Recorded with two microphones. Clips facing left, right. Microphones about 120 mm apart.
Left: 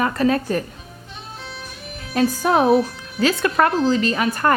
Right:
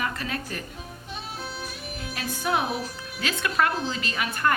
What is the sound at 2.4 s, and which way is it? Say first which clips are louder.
Speech: left 9 dB; 40° left (ahead or behind).